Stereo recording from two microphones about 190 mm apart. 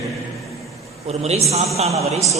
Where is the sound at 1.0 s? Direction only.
35° right (ahead or behind).